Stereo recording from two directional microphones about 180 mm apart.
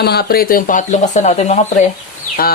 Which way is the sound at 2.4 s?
55° left (ahead or behind).